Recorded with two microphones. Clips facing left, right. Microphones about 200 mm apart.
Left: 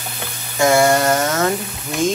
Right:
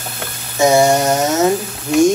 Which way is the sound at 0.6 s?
20° right (ahead or behind).